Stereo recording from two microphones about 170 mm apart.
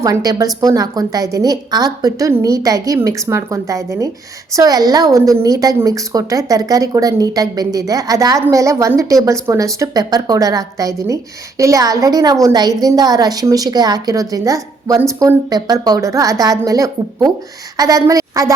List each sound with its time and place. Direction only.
0.0 s a woman's voice: 20° right (ahead or behind)